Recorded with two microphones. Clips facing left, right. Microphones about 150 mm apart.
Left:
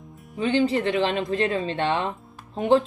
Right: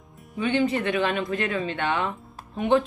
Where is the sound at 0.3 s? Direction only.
30° left (ahead or behind).